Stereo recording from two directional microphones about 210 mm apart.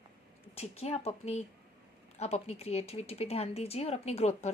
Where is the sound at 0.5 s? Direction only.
30° left (ahead or behind).